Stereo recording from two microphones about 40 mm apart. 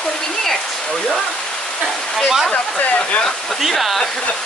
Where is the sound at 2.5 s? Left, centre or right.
Left.